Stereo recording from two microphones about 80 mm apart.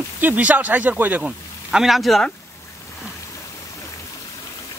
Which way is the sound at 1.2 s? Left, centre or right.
Centre.